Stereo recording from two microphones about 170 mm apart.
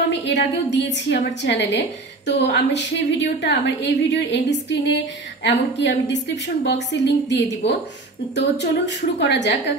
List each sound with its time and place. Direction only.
0.2 s a woman's voice: 90° left